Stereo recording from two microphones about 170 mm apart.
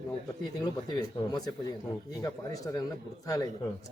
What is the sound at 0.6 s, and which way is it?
Speech, 25° left (ahead or behind).